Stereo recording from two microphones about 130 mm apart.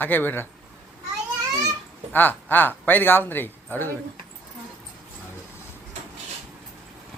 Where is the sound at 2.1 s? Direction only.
15° left (ahead or behind).